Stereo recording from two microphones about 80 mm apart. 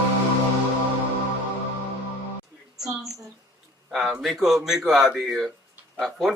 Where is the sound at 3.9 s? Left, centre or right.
Centre.